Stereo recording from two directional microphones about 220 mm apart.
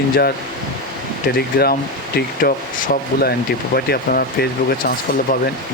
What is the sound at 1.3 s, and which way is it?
Speech, 45° left (ahead or behind).